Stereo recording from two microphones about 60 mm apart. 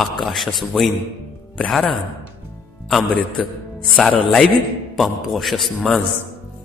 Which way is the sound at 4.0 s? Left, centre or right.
Centre.